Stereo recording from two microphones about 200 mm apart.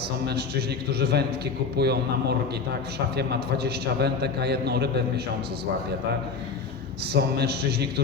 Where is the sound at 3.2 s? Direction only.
55° right (ahead or behind).